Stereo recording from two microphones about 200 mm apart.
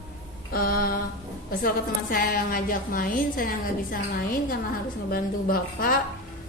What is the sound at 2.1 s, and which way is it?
A woman's voice, 45° left (ahead or behind).